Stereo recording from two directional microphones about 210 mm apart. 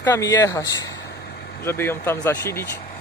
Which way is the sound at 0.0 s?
15° left (ahead or behind).